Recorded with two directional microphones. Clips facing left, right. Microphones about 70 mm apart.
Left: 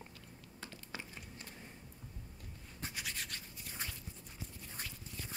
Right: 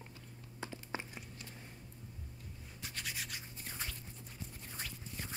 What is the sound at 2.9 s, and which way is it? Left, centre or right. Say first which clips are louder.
Scratch: right 2 dB; centre.